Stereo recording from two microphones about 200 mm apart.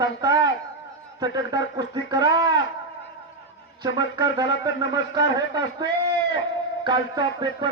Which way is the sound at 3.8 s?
20° right (ahead or behind).